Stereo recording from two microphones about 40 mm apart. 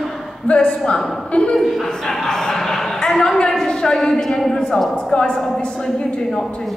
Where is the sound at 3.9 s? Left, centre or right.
Centre.